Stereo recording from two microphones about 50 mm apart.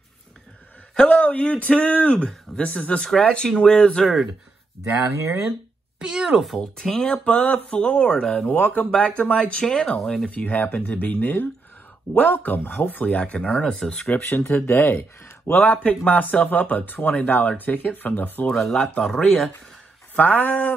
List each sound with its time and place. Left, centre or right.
0.9 s speech: left
3.2 s speech: centre
5.1 s speech: right
5.9 s speech: centre
6.6 s speech: centre
8.4 s speech: left
10.3 s speech: left; by 14.2 s centre
14.2 s speech: left
15.5 s speech: left
19.2 s speech: centre
20.2 s speech: left